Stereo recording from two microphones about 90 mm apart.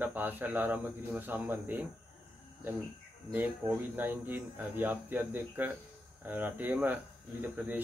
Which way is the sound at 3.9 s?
20° right (ahead or behind).